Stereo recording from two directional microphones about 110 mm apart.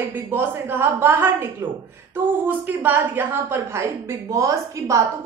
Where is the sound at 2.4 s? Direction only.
15° right (ahead or behind).